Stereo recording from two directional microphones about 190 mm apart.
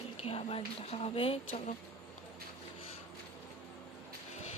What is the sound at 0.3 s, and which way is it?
Speech, 30° left (ahead or behind).